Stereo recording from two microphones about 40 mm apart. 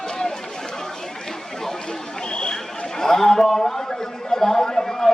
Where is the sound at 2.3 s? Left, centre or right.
Left.